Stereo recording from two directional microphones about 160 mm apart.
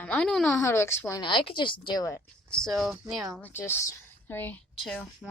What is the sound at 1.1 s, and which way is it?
Speech, 30° left (ahead or behind).